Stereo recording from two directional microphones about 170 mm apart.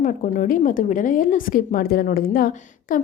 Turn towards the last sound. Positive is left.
turn(degrees=55)  # may be behind; listen again after turning